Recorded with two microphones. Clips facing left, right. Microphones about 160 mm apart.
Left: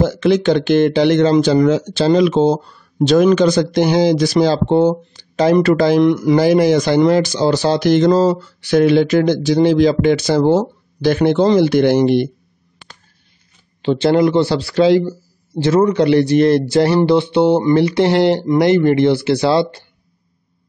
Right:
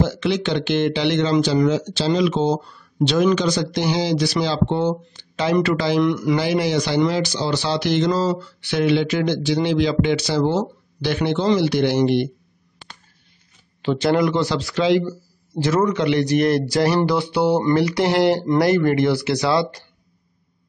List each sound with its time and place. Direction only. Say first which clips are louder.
0.0 s speech: left 7 dB; 45° left (ahead or behind)
13.8 s speech: left 5 dB; 30° left (ahead or behind)